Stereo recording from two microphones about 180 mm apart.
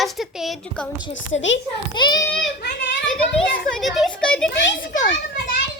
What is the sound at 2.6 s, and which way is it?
Speech, 65° left (ahead or behind).